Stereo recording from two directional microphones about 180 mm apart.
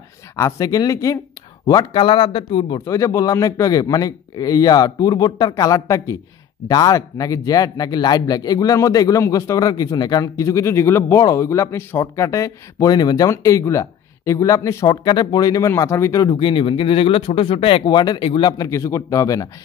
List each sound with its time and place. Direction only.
0.4 s a man's voice: 15° left (ahead or behind)
2.8 s a man's voice: 15° left (ahead or behind)